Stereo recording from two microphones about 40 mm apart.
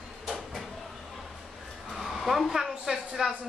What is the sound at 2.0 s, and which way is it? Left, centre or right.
Hair dryer, centre.